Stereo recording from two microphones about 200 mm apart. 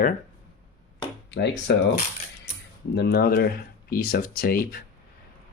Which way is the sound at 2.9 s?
55° left (ahead or behind).